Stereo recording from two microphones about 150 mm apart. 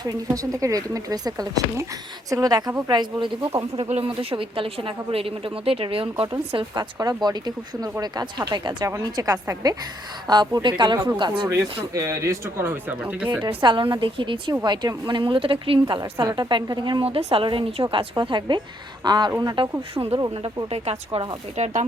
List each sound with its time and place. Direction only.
0.0 s speech: 25° right (ahead or behind)
3.8 s a woman's voice: 40° right (ahead or behind)
11.9 s speech: 20° right (ahead or behind)
13.4 s a woman's voice: 35° right (ahead or behind); by 21.8 s 50° right (ahead or behind)